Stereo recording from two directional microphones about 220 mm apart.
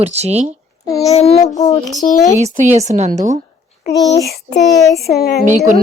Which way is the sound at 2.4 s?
30° right (ahead or behind).